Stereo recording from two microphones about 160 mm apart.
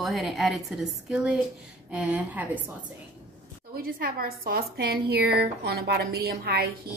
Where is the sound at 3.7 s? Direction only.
70° right (ahead or behind).